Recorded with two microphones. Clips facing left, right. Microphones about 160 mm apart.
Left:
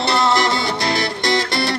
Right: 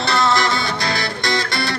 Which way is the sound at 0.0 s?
25° left (ahead or behind).